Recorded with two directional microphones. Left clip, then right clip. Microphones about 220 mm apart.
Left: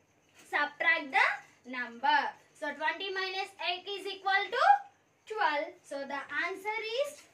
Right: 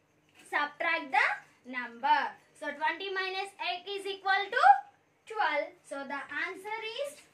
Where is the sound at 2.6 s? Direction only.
10° right (ahead or behind).